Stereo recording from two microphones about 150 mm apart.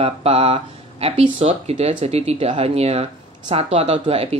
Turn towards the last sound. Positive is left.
turn(degrees=-40)  # may be behind; listen again after turning